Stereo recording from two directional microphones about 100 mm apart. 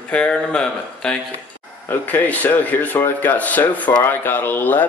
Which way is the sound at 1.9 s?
20° left (ahead or behind).